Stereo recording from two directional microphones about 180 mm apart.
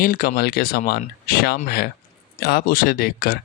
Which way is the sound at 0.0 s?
55° left (ahead or behind).